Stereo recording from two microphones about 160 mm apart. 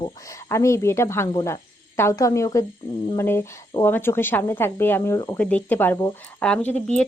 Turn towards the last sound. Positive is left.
turn(degrees=5)  # may be behind; listen again after turning